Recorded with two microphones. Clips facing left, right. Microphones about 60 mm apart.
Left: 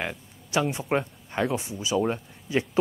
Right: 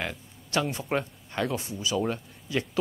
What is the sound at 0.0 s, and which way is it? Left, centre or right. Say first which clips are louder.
Speech: left 2 dB; centre.